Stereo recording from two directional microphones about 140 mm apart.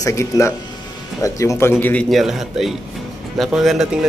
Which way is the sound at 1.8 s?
10° left (ahead or behind).